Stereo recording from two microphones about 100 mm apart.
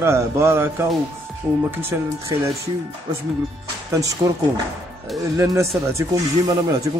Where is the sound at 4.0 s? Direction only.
35° right (ahead or behind).